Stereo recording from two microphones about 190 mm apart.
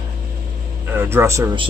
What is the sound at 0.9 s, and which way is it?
Speech, 10° right (ahead or behind).